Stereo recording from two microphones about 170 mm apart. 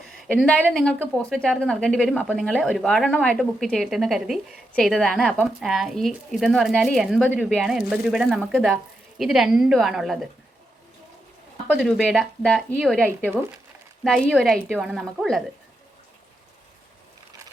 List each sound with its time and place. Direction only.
0.0 s a woman's voice: centre (ahead or behind)
11.7 s a woman's voice: 5° left (ahead or behind)